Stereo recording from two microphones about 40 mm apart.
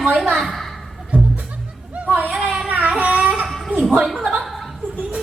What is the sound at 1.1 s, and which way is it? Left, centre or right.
Music, right.